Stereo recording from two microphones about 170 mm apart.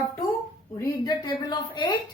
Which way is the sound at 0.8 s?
25° left (ahead or behind).